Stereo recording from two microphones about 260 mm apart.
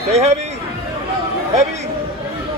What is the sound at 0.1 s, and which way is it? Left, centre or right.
Speech, right.